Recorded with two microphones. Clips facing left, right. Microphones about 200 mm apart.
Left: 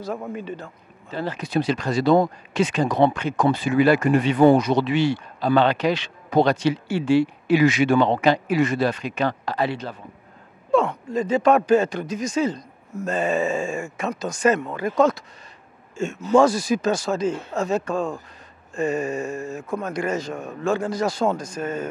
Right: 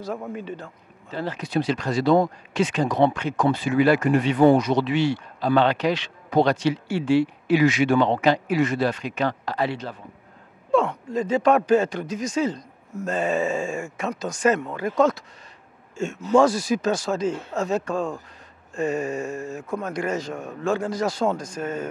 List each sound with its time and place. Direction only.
1.1 s speech: 15° left (ahead or behind)
4.4 s speech: 25° left (ahead or behind)
4.8 s speech: 10° left (ahead or behind)
16.3 s speech: 25° left (ahead or behind)
16.5 s speech: 5° left (ahead or behind)
16.9 s speech: 25° left (ahead or behind)